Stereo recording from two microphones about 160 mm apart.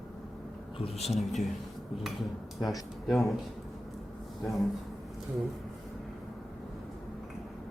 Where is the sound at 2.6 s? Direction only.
Centre (ahead or behind).